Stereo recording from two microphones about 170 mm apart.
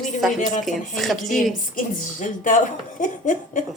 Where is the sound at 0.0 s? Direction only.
Centre (ahead or behind).